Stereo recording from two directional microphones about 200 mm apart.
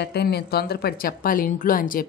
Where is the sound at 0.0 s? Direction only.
55° left (ahead or behind).